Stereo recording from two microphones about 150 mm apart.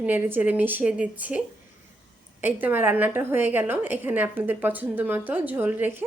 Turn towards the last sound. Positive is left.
turn(degrees=-15)  # may be behind; listen again after turning